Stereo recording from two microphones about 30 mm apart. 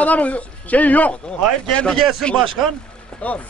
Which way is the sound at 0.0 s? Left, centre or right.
Left.